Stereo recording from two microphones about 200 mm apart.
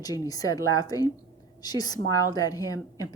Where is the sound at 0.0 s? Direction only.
20° left (ahead or behind).